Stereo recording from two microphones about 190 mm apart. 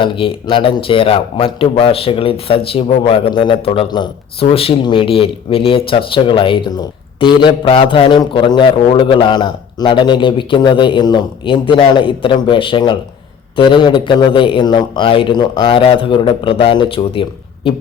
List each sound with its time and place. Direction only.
0.0 s a man's voice: 25° left (ahead or behind)